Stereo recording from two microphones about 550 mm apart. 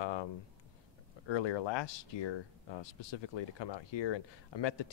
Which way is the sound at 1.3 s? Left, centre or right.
Left.